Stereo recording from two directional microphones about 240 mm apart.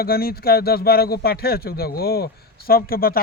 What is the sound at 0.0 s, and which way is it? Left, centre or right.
Speech, left.